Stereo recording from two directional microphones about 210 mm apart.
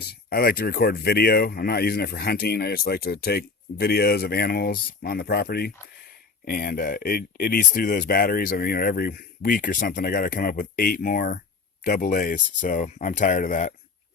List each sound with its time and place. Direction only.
0.3 s speech: 45° left (ahead or behind)